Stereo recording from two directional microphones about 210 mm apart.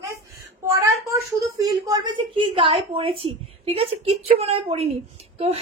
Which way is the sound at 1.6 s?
20° right (ahead or behind).